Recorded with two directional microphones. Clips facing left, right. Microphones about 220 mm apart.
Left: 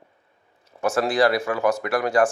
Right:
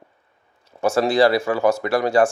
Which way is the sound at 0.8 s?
25° right (ahead or behind).